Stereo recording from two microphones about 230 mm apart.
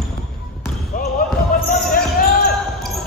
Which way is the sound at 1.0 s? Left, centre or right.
Left.